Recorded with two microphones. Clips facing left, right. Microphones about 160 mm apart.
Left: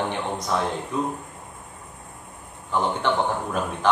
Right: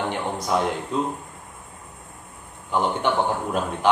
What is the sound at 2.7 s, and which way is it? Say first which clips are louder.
Speech: right 1 dB; 15° right (ahead or behind).